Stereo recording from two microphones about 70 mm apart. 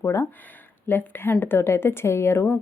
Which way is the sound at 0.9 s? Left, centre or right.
Left.